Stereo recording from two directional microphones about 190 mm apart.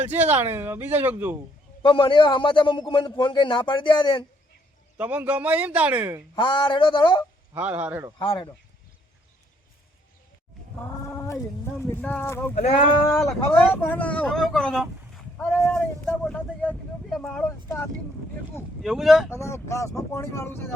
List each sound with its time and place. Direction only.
0.3 s speech: 10° right (ahead or behind)
1.8 s a man's voice: 25° left (ahead or behind)
4.9 s speech: 10° right (ahead or behind)
6.3 s a man's voice: 25° left (ahead or behind)
7.5 s speech: 10° right (ahead or behind)
8.2 s a man's voice: 25° left (ahead or behind)
10.8 s a sound: 10° left (ahead or behind)
11.8 s speech: 10° left (ahead or behind)
15.6 s a sound: 10° left (ahead or behind)
18.8 s speech: centre (ahead or behind)
19.3 s speech: 15° left (ahead or behind)